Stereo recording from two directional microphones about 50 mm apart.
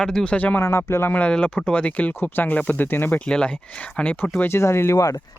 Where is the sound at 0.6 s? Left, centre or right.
Left.